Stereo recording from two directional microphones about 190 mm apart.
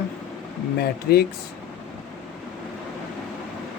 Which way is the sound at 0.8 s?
55° left (ahead or behind).